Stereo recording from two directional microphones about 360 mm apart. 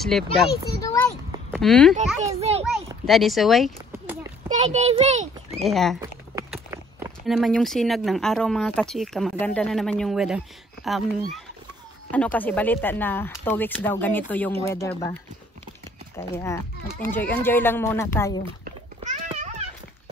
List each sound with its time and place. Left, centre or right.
0.0 s speech: centre
2.6 s a sound: centre
4.5 s a child's voice: centre
5.6 s speech: centre
12.1 s speech: centre
16.2 s speech: centre
18.6 s a sound: centre